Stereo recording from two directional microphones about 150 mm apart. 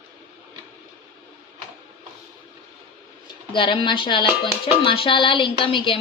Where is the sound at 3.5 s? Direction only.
35° left (ahead or behind).